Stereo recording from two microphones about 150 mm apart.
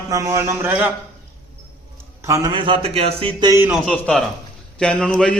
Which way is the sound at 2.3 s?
20° right (ahead or behind).